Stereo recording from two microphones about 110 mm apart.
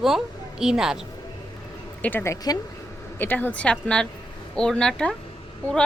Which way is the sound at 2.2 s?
25° left (ahead or behind).